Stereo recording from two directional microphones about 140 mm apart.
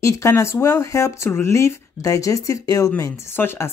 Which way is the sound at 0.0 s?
20° left (ahead or behind).